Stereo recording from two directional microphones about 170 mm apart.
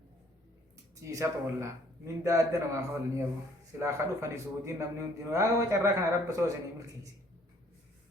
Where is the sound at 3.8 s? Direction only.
15° right (ahead or behind).